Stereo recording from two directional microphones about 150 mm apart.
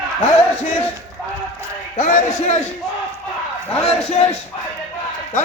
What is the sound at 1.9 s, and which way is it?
Speech, 55° left (ahead or behind).